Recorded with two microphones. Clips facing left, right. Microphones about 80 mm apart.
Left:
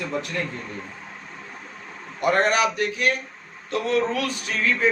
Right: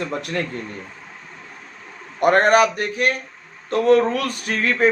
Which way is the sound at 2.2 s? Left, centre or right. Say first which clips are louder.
Right 6 dB; right.